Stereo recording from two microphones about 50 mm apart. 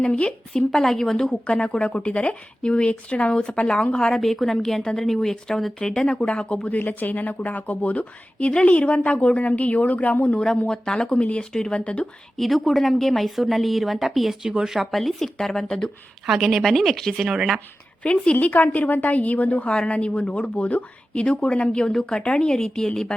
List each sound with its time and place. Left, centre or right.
0.0 s a woman's voice: left
6.7 s speech: left
10.3 s a woman's voice: centre
12.4 s speech: centre
14.4 s speech: centre
16.2 s speech: centre
16.6 s speech: centre
17.2 s speech: centre
18.0 s a woman's voice: left
19.7 s speech: centre